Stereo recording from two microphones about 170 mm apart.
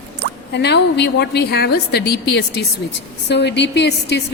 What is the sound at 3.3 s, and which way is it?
Speech, 90° left.